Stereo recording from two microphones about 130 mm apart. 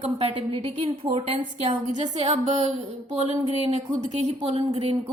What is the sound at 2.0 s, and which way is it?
Speech, 60° right (ahead or behind).